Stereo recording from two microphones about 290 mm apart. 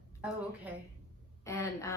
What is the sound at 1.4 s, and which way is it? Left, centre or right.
Speech, centre.